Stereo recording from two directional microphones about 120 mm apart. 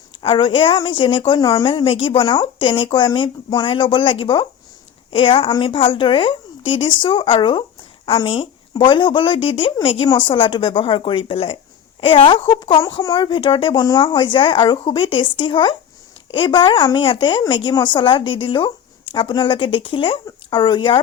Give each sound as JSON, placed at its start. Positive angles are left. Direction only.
{"t": 0.2, "sound": "speech", "side_deg": 45}
{"t": 1.7, "sound": "speech", "side_deg": 45}
{"t": 12.8, "sound": "speech", "side_deg": 30}